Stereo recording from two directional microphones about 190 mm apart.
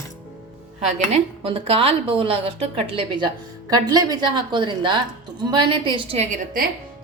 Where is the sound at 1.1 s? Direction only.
30° right (ahead or behind).